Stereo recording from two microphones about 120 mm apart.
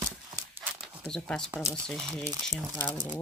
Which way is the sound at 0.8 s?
5° left (ahead or behind).